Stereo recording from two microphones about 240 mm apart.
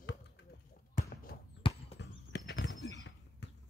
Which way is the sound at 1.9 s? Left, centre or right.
Left.